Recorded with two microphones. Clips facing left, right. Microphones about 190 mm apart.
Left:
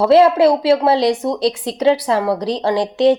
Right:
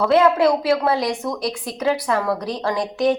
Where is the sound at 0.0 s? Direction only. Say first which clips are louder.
Left 5 dB; 30° left (ahead or behind).